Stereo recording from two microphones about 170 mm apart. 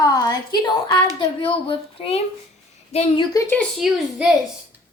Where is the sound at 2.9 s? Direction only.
35° left (ahead or behind).